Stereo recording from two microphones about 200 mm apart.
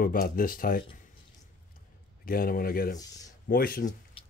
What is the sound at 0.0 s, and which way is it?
Speech, 45° left (ahead or behind).